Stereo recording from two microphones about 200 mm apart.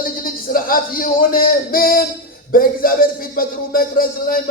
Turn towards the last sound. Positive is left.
turn(degrees=45)  # may be behind; listen again after turning